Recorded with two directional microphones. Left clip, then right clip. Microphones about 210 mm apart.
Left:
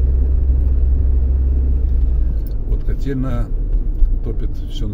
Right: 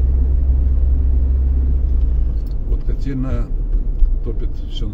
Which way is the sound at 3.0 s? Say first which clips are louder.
Left 2 dB; 30° left (ahead or behind).